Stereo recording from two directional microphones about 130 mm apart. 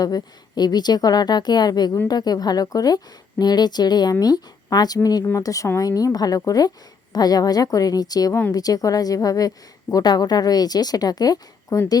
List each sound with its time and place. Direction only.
0.0 s a woman's voice: 30° left (ahead or behind)